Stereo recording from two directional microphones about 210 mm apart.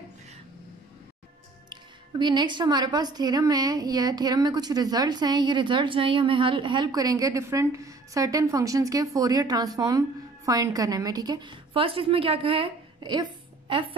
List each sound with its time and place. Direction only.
1.7 s speech: 20° right (ahead or behind)